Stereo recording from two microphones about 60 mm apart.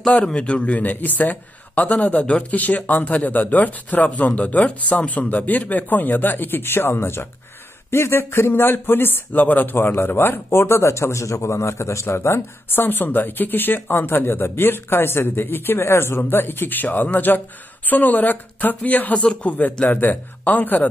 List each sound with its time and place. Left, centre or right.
0.1 s a man's voice: left